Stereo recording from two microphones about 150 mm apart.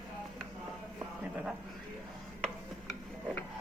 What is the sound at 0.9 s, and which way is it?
Music, 10° right (ahead or behind).